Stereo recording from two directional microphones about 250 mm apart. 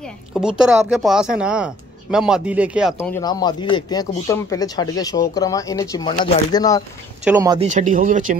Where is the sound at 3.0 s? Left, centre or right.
Centre.